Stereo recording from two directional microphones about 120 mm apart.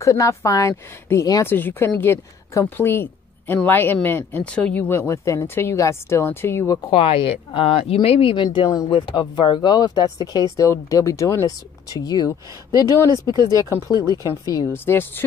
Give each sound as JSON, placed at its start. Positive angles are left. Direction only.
{"t": 0.0, "sound": "a woman's voice", "side_deg": 25}
{"t": 6.9, "sound": "speech", "side_deg": 50}
{"t": 8.6, "sound": "a woman's voice", "side_deg": 30}
{"t": 13.3, "sound": "speech", "side_deg": -35}
{"t": 13.6, "sound": "a woman's voice", "side_deg": 25}
{"t": 14.9, "sound": "a woman's voice", "side_deg": 20}